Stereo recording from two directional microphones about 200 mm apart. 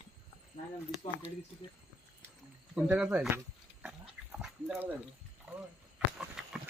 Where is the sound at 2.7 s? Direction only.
5° right (ahead or behind).